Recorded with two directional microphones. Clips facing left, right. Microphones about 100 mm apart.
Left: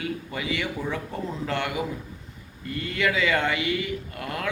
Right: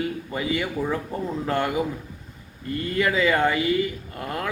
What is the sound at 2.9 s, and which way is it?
Speech, 40° right (ahead or behind).